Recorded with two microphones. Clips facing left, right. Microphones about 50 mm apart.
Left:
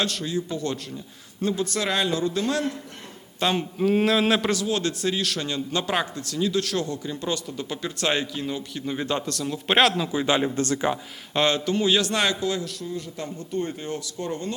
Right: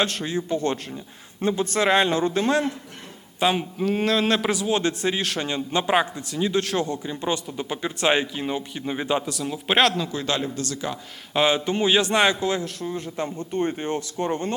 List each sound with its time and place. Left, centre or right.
0.0 s a man's voice: right
3.4 s speech: centre
3.8 s speech: centre
4.4 s a man's voice: centre
10.5 s speech: left
11.3 s speech: centre
11.6 s a man's voice: right